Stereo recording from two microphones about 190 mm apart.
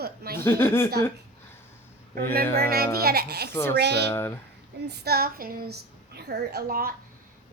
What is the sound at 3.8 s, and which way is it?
Speech, 60° right (ahead or behind).